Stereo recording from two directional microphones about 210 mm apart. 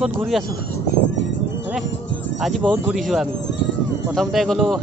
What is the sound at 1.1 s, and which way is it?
Music, 60° left (ahead or behind).